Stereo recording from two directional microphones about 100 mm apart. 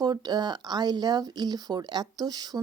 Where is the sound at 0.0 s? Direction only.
40° right (ahead or behind).